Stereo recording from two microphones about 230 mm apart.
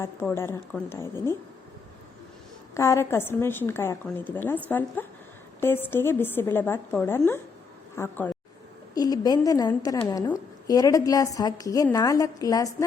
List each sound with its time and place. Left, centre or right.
0.0 s a woman's voice: centre
2.7 s a woman's voice: centre